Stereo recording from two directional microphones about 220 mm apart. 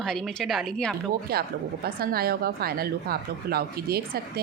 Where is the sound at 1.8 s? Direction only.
45° right (ahead or behind).